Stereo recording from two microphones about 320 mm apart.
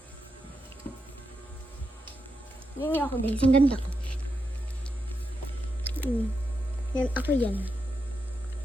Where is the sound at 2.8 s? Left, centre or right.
Centre.